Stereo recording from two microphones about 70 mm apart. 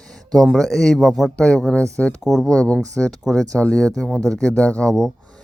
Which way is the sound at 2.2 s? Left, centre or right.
Centre.